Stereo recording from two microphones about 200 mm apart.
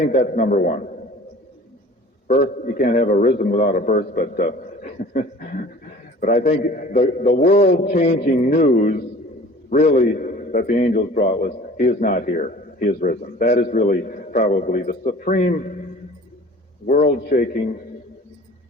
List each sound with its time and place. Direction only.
0.0 s a man's voice: 40° left (ahead or behind)
2.2 s a man's voice: 50° left (ahead or behind)
6.5 s a man's voice: 50° left (ahead or behind)
16.8 s a man's voice: 45° left (ahead or behind)